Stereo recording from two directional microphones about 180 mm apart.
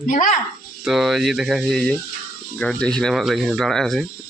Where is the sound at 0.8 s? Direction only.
Centre (ahead or behind).